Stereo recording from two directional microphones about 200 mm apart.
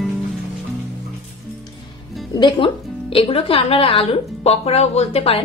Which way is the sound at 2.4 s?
25° left (ahead or behind).